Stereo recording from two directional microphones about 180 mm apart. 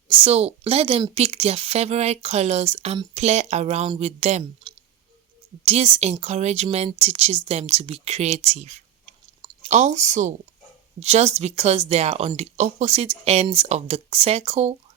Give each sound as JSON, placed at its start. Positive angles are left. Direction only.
{"t": 0.1, "sound": "speech", "side_deg": -35}